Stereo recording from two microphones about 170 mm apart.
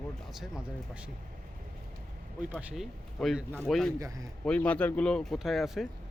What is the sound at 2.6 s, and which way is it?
Speech, centre (ahead or behind).